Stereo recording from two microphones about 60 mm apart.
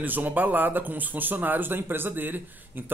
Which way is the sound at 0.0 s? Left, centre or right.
Right.